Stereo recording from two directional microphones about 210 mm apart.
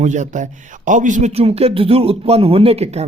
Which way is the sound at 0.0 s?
35° right (ahead or behind).